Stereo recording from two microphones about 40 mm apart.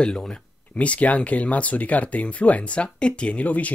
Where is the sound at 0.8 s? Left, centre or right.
Left.